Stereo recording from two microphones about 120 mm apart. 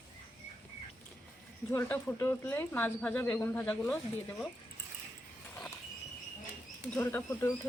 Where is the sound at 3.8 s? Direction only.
5° left (ahead or behind).